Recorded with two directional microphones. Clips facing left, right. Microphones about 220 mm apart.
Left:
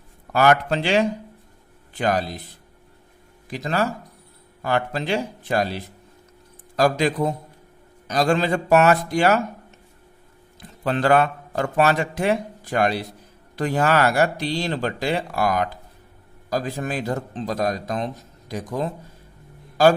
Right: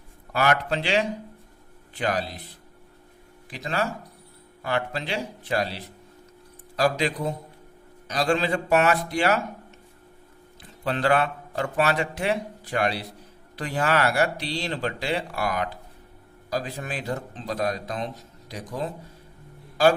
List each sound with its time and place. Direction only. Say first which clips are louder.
0.3 s speech: left 5 dB; 45° left (ahead or behind)
3.5 s speech: left 4 dB; 45° left (ahead or behind)
6.7 s speech: left 4 dB; 45° left (ahead or behind)
10.6 s speech: left 3 dB; 45° left (ahead or behind)